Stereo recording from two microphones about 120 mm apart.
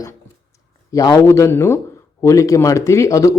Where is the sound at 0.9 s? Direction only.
25° left (ahead or behind).